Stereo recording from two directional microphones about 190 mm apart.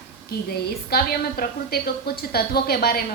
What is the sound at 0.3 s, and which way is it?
A woman's voice, 55° left (ahead or behind).